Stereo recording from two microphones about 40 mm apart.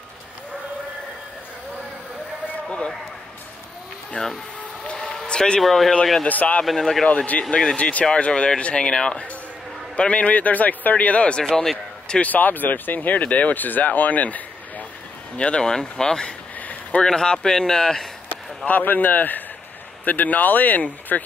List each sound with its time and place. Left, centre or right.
4.2 s speech: left
5.1 s a sound: centre
5.6 s speech: centre
6.2 s a man's voice: left
6.6 s speech: centre
7.3 s a man's voice: left
9.9 s a man's voice: left
11.4 s speech: centre
12.2 s speech: left
15.3 s speech: left
16.5 s a sound: left
17.0 s speech: centre
18.7 s speech: left